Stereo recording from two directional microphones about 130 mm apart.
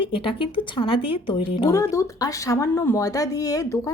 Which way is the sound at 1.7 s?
25° left (ahead or behind).